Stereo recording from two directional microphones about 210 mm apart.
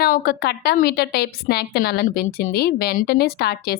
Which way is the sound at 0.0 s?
45° left (ahead or behind).